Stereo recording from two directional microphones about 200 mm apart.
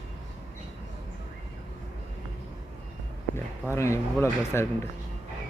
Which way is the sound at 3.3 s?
15° left (ahead or behind).